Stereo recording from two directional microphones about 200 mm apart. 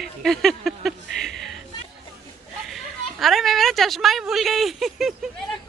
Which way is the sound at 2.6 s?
Centre (ahead or behind).